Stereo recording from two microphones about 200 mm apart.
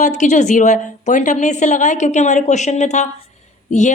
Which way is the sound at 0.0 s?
35° left (ahead or behind).